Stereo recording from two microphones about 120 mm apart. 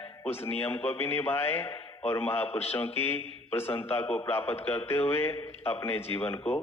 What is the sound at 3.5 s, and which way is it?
A man's voice, 20° left (ahead or behind).